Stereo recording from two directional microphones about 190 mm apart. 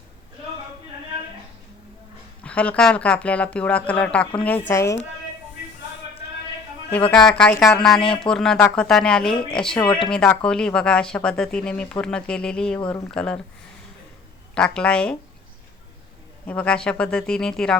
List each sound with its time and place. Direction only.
2.4 s speech: 5° left (ahead or behind)
6.9 s speech: 5° left (ahead or behind)
14.5 s speech: 5° left (ahead or behind)
16.5 s speech: 5° left (ahead or behind)